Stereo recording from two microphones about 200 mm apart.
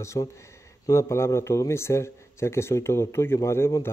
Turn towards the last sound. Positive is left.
turn(degrees=10)  # may be behind; listen again after turning